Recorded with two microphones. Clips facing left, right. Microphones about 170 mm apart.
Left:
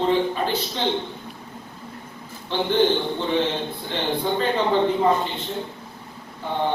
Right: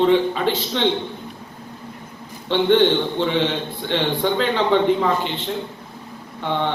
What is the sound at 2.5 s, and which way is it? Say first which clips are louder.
A man's voice: right 4 dB; 70° right (ahead or behind).